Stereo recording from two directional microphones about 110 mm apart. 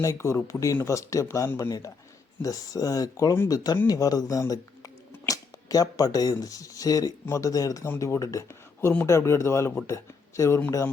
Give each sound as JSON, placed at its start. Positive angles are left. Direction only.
{"t": 0.0, "sound": "speech", "side_deg": 25}